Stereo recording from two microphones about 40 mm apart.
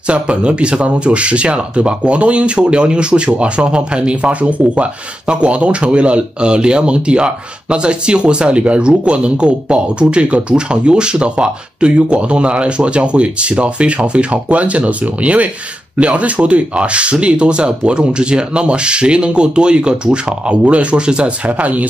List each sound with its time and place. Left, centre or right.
0.0 s speech: right
21.5 s speech: right